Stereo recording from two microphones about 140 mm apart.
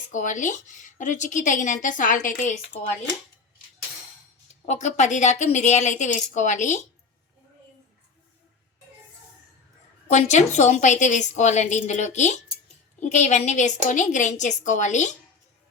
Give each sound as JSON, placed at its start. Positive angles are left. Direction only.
{"t": 0.1, "sound": "a woman's voice", "side_deg": 65}
{"t": 4.6, "sound": "a woman's voice", "side_deg": 55}
{"t": 10.1, "sound": "a woman's voice", "side_deg": 55}